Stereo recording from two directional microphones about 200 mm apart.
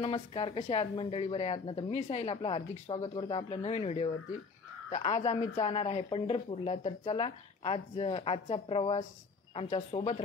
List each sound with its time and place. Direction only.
0.0 s speech: 30° left (ahead or behind)